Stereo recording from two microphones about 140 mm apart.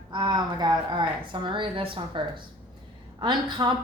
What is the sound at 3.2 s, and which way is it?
Speech, 35° right (ahead or behind).